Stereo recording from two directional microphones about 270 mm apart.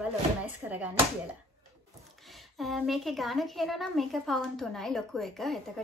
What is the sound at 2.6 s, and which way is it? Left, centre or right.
Speech, centre.